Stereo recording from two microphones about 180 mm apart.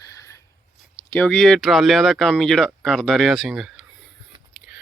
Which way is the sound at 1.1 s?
5° left (ahead or behind).